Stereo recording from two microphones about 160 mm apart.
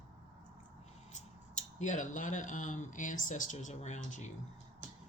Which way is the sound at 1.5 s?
50° left (ahead or behind).